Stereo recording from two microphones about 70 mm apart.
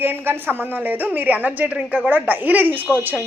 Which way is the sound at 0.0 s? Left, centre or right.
Right.